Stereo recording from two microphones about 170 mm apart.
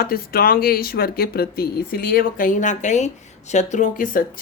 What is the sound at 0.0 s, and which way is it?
A woman's voice, 60° left (ahead or behind).